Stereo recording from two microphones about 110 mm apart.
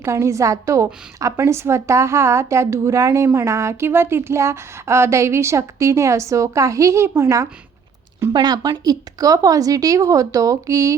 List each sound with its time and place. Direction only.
0.0 s speech: 25° right (ahead or behind)
8.3 s speech: 40° right (ahead or behind)